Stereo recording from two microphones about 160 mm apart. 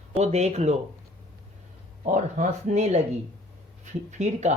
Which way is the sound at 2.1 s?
50° right (ahead or behind).